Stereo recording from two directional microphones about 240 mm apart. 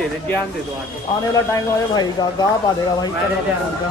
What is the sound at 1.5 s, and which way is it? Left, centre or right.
A woman's voice, centre.